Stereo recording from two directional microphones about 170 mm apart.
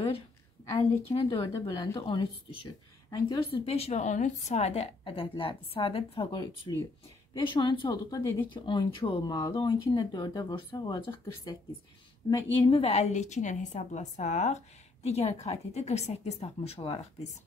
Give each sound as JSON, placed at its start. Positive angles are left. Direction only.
{"t": 1.3, "sound": "a woman's voice", "side_deg": 25}